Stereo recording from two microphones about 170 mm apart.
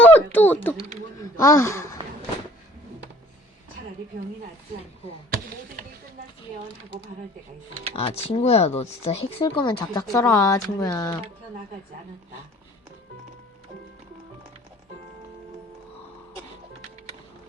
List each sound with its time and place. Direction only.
0.0 s a sound: 10° left (ahead or behind)
1.2 s speech: 20° left (ahead or behind)
5.3 s basketball bounce: 55° right (ahead or behind)
7.9 s speech: 35° left (ahead or behind); by 11.2 s 20° left (ahead or behind)